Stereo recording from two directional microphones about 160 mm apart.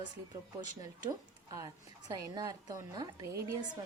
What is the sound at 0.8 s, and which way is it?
A woman's voice, 25° right (ahead or behind).